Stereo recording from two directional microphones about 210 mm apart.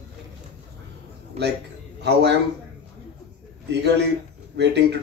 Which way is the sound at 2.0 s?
55° right (ahead or behind).